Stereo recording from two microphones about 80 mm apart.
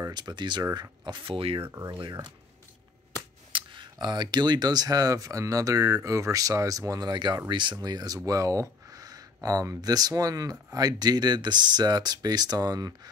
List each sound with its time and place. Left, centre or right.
0.1 s speech: right
1.0 s speech: right
3.5 s speech: right
7.8 s speech: right
8.3 s speech: right